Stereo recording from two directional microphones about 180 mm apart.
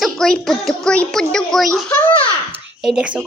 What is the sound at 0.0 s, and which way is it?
A child's voice, 5° left (ahead or behind).